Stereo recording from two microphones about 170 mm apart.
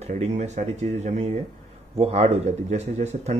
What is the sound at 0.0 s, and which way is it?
Speech, 40° right (ahead or behind).